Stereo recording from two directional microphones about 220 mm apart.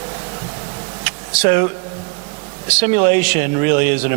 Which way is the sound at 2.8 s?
15° right (ahead or behind).